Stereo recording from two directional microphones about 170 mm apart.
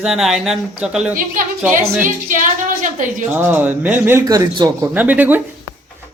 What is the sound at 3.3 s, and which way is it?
Speech, 10° right (ahead or behind).